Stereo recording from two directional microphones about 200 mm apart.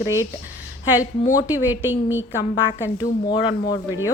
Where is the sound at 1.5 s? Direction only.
10° right (ahead or behind).